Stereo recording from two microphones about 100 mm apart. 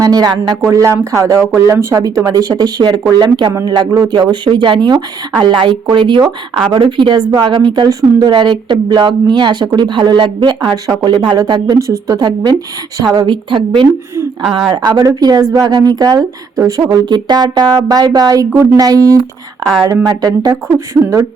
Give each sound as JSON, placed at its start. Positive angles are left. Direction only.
{"t": 0.0, "sound": "speech", "side_deg": -40}
{"t": 0.7, "sound": "speech", "side_deg": -30}
{"t": 4.2, "sound": "a woman's voice", "side_deg": -50}
{"t": 14.7, "sound": "speech", "side_deg": -40}
{"t": 17.1, "sound": "speech", "side_deg": -50}